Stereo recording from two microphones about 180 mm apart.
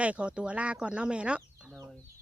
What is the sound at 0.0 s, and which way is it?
Speech, 5° right (ahead or behind).